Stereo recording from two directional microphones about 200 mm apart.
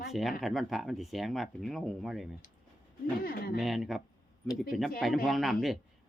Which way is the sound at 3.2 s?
45° left (ahead or behind).